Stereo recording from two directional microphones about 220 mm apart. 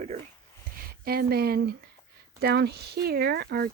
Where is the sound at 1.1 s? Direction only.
45° right (ahead or behind).